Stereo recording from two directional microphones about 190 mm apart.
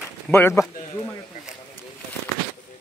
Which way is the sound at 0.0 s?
10° left (ahead or behind).